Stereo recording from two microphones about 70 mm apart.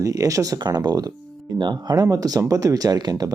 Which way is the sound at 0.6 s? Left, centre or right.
Right.